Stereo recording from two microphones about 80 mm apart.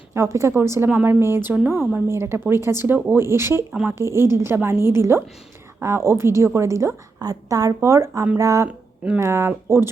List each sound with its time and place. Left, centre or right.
0.1 s speech: right
0.9 s speech: centre
2.0 s speech: right
7.2 s speech: right